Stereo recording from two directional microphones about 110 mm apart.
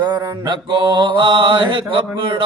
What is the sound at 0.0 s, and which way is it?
Mantra, 40° right (ahead or behind).